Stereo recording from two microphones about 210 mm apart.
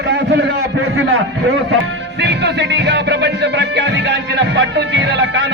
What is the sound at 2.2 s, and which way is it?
Music, 55° right (ahead or behind).